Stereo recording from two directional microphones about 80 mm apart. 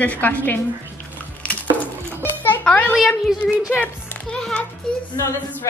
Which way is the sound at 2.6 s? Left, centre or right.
Centre.